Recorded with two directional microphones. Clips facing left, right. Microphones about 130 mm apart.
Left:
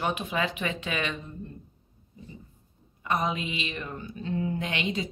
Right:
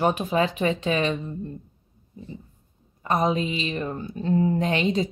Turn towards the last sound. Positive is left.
turn(degrees=-35)  # may be behind; listen again after turning